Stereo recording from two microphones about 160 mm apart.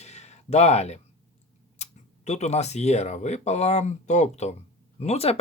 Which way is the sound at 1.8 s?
45° left (ahead or behind).